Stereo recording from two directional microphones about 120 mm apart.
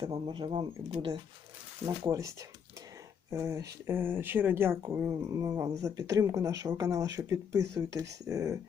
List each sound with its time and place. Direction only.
0.0 s speech: 40° right (ahead or behind)
2.0 s speech: 25° right (ahead or behind)